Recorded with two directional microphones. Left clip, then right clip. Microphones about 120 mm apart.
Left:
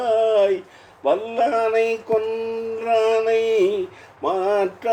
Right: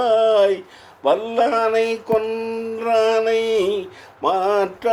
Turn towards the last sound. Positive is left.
turn(degrees=-50)  # may be behind; listen again after turning